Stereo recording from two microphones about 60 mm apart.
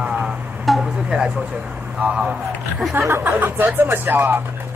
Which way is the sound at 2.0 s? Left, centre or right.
Centre.